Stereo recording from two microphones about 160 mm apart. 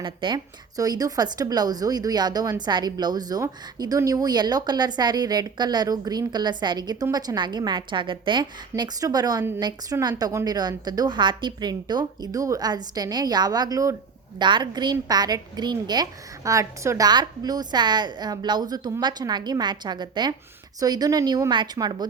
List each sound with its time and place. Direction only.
0.0 s a woman's voice: 30° right (ahead or behind)